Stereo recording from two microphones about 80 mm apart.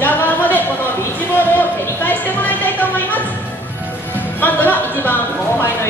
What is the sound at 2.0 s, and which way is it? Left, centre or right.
Music, left.